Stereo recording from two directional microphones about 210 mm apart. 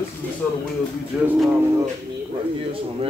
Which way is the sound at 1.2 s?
Centre (ahead or behind).